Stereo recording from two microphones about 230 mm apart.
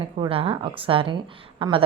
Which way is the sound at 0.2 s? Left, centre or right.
Right.